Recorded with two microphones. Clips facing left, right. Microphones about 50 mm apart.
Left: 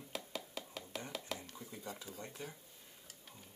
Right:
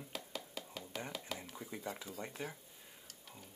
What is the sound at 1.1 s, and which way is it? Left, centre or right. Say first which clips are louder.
Speech: left 1 dB; centre.